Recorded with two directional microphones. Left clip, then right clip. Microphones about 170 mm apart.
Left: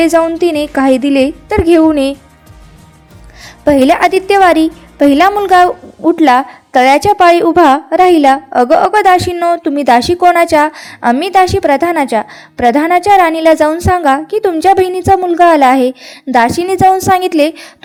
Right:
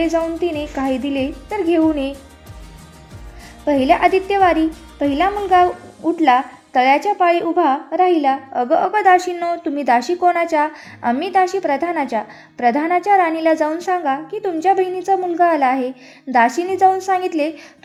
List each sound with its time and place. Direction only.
0.0 s a woman's voice: 35° left (ahead or behind)
3.4 s a woman's voice: 35° left (ahead or behind)